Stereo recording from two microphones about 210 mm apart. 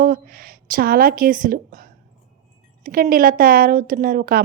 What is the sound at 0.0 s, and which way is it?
A woman's voice, 45° right (ahead or behind).